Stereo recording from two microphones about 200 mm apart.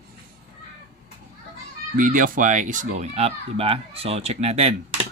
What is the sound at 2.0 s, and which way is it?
Speech, 40° right (ahead or behind).